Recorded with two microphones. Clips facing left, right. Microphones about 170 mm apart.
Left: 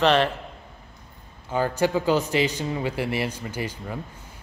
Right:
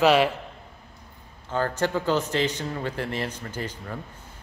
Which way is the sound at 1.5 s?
10° left (ahead or behind).